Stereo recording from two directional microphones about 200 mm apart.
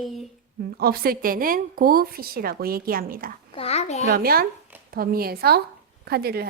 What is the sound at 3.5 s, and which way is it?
Speech, 30° left (ahead or behind).